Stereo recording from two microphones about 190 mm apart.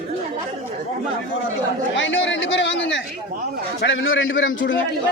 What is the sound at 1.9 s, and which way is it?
A man's voice, 80° left.